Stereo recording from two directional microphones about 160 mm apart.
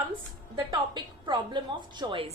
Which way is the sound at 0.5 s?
30° right (ahead or behind).